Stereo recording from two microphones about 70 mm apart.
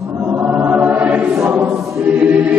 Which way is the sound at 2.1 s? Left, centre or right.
Right.